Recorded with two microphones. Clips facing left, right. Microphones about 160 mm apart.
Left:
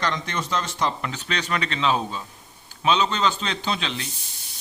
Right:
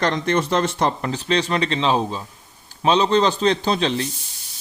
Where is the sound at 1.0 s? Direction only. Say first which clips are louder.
Right 8 dB; 35° right (ahead or behind).